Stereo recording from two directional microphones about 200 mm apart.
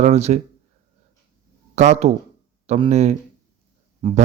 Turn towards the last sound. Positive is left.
turn(degrees=-25)  # may be behind; listen again after turning